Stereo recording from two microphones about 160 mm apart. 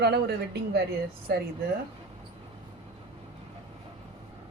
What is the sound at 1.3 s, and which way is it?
Speech, 80° right.